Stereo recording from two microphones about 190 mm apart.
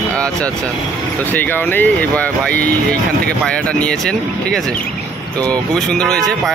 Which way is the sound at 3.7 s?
5° left (ahead or behind).